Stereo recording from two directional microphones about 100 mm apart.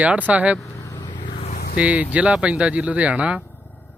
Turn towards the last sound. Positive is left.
turn(degrees=20)  # may be behind; listen again after turning